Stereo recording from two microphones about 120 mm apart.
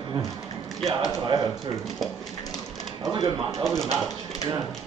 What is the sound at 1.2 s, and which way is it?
Speech, 35° right (ahead or behind).